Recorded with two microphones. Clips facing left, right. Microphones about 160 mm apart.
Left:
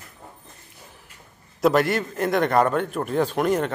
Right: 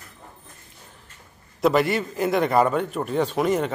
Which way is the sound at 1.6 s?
Centre (ahead or behind).